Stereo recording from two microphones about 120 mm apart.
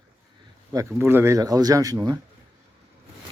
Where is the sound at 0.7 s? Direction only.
20° right (ahead or behind).